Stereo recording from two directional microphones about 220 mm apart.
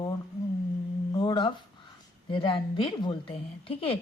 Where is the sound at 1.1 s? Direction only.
20° left (ahead or behind).